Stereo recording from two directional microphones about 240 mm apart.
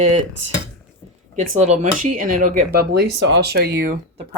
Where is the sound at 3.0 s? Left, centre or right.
Right.